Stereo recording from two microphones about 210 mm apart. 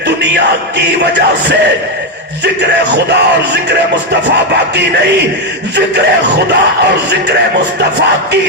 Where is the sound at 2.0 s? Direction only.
55° right (ahead or behind).